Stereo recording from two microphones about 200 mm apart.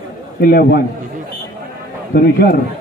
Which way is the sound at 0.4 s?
50° left (ahead or behind).